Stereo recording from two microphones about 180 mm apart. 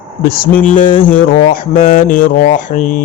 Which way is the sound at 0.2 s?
55° left (ahead or behind).